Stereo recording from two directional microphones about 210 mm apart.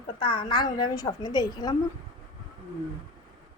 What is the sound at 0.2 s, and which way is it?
A woman's voice, 25° left (ahead or behind).